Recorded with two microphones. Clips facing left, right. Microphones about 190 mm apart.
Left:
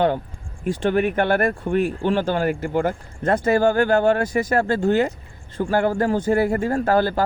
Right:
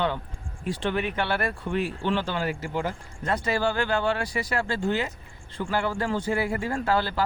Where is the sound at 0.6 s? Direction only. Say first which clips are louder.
Left 8 dB; 45° left (ahead or behind).